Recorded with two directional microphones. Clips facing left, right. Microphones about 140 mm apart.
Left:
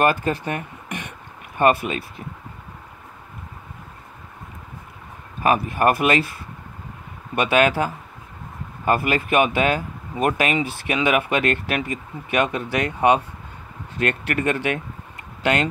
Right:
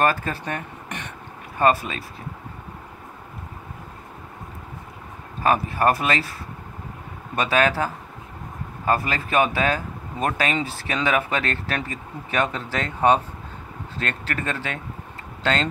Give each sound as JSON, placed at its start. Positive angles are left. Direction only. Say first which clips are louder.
{"t": 0.0, "sound": "speech", "louder": "left 2 dB", "side_deg": 15}
{"t": 5.4, "sound": "speech", "louder": "left 1 dB", "side_deg": 15}
{"t": 7.3, "sound": "speech", "louder": "left 3 dB", "side_deg": 15}